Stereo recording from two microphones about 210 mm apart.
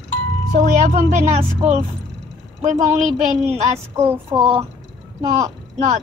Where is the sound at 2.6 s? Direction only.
35° right (ahead or behind).